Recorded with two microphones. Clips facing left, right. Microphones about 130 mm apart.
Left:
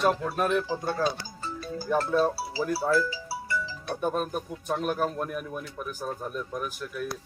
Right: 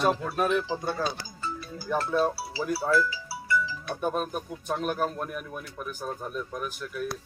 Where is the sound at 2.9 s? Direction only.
35° left (ahead or behind).